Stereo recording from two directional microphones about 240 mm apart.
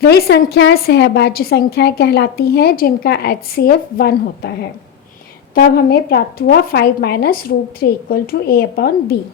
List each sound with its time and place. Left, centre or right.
0.0 s a woman's voice: left
5.5 s a woman's voice: left